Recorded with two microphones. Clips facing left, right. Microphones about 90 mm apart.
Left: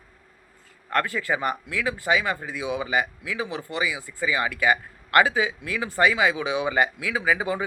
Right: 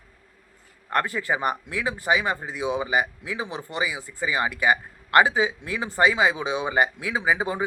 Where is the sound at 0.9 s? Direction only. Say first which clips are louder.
Even; 20° right (ahead or behind).